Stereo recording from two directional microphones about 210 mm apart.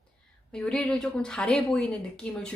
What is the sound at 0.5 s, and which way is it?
Dishes, 5° left (ahead or behind).